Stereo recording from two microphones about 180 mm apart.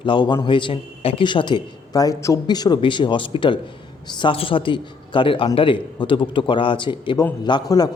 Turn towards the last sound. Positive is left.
turn(degrees=25)  # may be behind; listen again after turning